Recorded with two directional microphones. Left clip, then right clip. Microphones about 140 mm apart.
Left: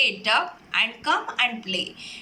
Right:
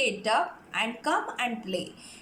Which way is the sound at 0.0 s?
35° right (ahead or behind).